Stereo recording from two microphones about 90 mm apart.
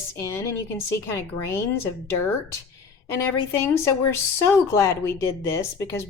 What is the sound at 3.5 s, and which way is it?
A woman's voice, 30° left (ahead or behind).